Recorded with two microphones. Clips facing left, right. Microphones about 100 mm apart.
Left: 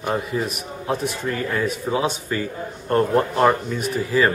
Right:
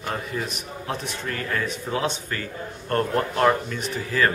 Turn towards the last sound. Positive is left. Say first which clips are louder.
# left 4 dB
turn(degrees=10)  # may be behind; listen again after turning